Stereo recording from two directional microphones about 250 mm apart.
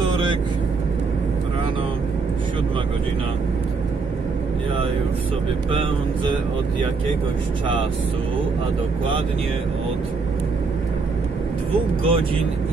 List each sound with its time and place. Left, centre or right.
5.7 s speech: centre
12.0 s speech: right